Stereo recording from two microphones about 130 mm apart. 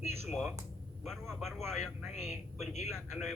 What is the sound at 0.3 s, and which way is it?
A woman's voice, 5° left (ahead or behind).